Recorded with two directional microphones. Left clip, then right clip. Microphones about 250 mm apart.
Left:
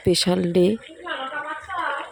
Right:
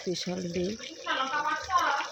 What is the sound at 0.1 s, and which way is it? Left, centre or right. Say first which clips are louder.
Speech: left 14 dB; left.